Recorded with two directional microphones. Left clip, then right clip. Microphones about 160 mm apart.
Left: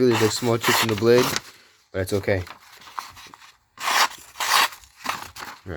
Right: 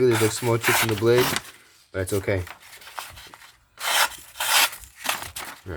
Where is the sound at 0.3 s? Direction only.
60° left (ahead or behind).